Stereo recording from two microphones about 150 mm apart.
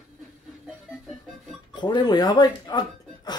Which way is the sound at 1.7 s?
30° left (ahead or behind).